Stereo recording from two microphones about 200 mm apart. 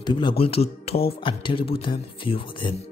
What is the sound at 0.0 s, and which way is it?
Speech, 25° left (ahead or behind).